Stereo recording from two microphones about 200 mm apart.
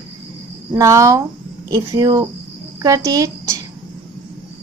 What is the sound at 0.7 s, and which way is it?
Speech, 15° right (ahead or behind).